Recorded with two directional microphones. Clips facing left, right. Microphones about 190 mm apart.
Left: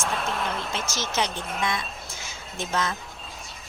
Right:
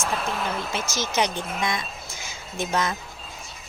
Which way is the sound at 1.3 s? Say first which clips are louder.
Right 2 dB; centre (ahead or behind).